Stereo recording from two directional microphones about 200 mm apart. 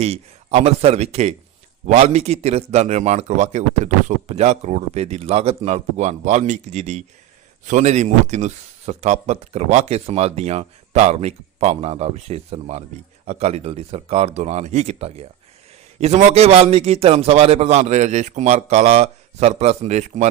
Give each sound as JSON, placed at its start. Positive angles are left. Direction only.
{"t": 0.0, "sound": "a man's voice", "side_deg": -35}